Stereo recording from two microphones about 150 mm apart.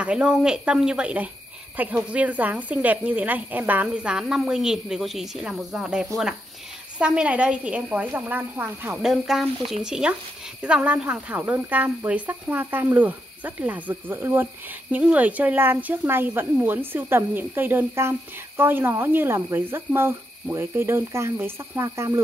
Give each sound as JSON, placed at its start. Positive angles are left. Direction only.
{"t": 0.0, "sound": "speech", "side_deg": -5}